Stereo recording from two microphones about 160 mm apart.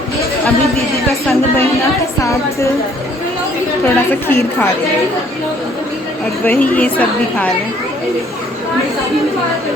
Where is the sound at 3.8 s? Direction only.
15° left (ahead or behind).